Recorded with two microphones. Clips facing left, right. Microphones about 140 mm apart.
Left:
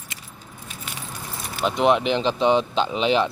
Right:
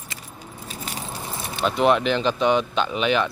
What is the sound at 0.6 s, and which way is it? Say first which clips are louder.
Keys jangling: right 4 dB; 40° right (ahead or behind).